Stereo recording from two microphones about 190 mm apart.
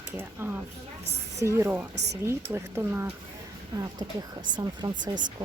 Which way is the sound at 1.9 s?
60° right (ahead or behind).